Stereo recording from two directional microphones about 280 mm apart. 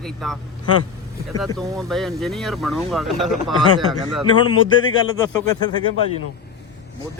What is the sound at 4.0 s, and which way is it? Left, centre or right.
Speech, centre.